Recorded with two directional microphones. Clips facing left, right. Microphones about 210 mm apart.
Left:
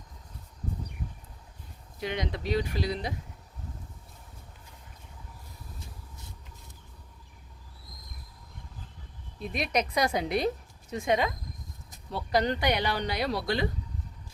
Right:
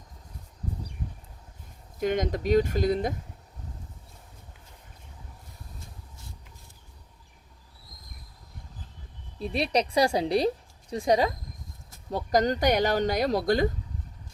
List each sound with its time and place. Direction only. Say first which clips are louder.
2.0 s speech: right 6 dB; 45° right (ahead or behind)
9.4 s a woman's voice: right 3 dB; 35° right (ahead or behind)